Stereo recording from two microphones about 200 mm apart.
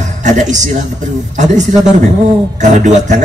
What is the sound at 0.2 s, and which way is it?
Speech, 35° right (ahead or behind).